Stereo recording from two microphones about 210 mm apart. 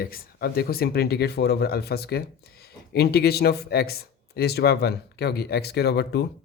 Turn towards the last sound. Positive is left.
turn(degrees=50)  # may be behind; listen again after turning